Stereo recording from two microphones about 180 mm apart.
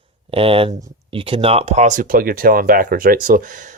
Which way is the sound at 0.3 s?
30° right (ahead or behind).